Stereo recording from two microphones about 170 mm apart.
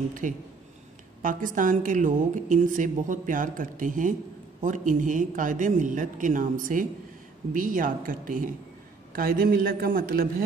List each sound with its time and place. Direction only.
0.2 s a woman's voice: 50° right (ahead or behind)